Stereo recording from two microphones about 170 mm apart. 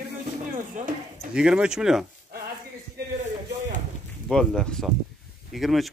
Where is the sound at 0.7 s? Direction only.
50° right (ahead or behind).